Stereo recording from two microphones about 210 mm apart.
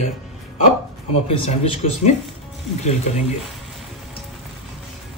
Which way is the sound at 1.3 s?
25° left (ahead or behind).